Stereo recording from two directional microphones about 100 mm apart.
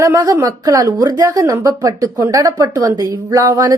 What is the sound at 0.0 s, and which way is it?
Speech, 30° right (ahead or behind).